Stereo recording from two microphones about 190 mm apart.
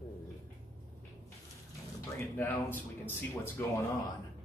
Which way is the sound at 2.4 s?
10° left (ahead or behind).